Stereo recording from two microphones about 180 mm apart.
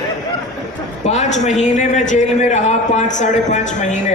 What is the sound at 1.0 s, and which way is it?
A man's voice, 40° left (ahead or behind).